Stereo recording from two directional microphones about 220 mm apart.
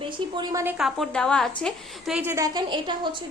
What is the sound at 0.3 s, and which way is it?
A woman's voice, 10° right (ahead or behind).